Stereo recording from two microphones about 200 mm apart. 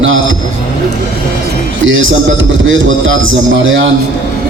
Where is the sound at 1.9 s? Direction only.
75° right (ahead or behind).